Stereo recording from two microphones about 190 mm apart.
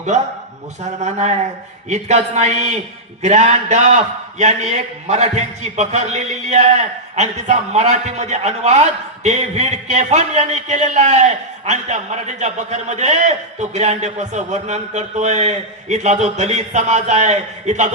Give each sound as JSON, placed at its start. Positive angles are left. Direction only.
{"t": 0.8, "sound": "a man's voice", "side_deg": -35}